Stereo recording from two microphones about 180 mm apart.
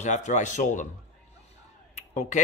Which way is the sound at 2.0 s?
40° left (ahead or behind).